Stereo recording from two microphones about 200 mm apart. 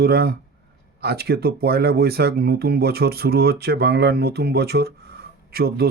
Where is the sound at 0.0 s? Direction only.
50° right (ahead or behind).